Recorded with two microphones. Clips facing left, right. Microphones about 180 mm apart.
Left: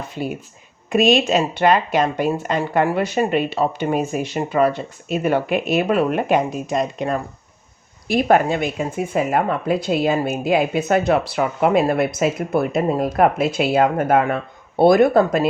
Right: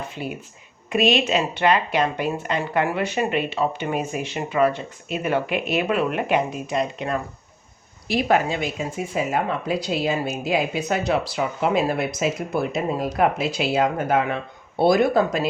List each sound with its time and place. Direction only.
0.9 s speech: 45° left (ahead or behind)